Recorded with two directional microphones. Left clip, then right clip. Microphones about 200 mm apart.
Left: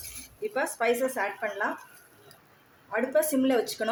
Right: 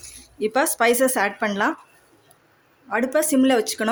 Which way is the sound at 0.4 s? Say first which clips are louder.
Right 8 dB; 55° right (ahead or behind).